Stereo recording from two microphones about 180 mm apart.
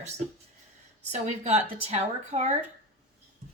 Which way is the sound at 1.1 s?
40° right (ahead or behind).